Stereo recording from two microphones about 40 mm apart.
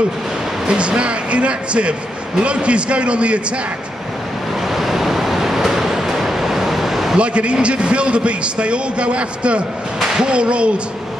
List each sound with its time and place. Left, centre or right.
0.7 s a man's voice: right
4.6 s waves: centre
7.2 s a man's voice: right